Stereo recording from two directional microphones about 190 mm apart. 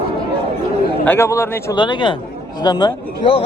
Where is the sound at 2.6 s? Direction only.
25° left (ahead or behind).